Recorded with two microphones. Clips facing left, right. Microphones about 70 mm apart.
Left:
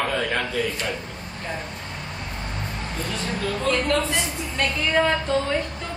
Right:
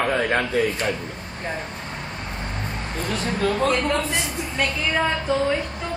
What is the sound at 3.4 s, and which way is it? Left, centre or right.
Speech, right.